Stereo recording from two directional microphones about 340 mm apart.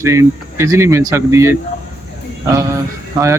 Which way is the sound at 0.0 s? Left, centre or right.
Centre.